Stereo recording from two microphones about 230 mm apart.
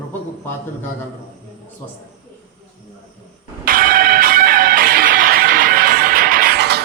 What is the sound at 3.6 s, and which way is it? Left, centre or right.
Music, right.